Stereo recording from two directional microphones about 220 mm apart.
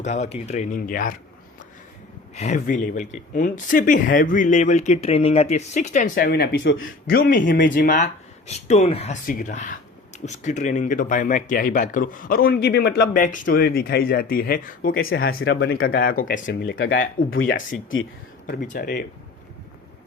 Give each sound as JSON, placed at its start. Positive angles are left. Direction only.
{"t": 0.0, "sound": "speech", "side_deg": 30}
{"t": 2.3, "sound": "speech", "side_deg": 30}
{"t": 18.4, "sound": "speech", "side_deg": 40}